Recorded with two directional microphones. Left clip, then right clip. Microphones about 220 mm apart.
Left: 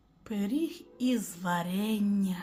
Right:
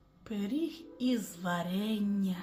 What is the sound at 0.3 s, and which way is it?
Music, 15° left (ahead or behind).